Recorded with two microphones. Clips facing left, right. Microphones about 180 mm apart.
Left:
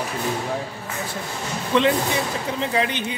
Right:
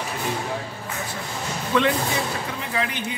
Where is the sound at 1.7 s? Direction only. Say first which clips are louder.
Left 2 dB; 25° left (ahead or behind).